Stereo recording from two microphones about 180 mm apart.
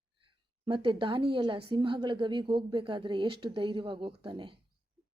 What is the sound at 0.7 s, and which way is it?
Speech, 30° right (ahead or behind).